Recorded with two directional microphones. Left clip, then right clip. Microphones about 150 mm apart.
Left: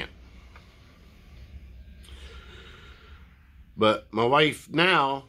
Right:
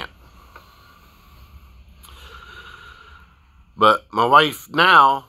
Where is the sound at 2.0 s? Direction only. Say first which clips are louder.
Right 7 dB; 20° left (ahead or behind).